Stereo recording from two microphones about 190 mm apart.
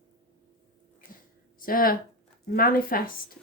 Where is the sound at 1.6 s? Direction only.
50° left (ahead or behind).